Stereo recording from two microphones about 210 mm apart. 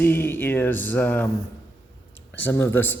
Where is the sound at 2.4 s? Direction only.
10° left (ahead or behind).